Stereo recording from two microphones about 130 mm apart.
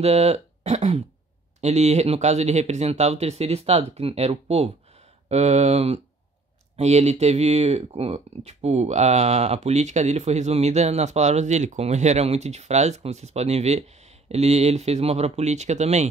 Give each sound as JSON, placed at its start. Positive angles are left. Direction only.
{"t": 0.0, "sound": "speech", "side_deg": -55}